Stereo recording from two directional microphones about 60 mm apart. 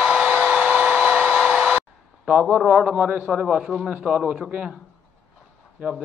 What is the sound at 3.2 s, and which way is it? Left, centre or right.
A man's voice, centre.